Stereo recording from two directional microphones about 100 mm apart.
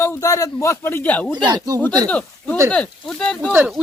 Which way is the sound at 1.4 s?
45° right (ahead or behind).